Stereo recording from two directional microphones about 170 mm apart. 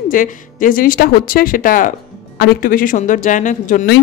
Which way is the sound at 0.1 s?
50° left (ahead or behind).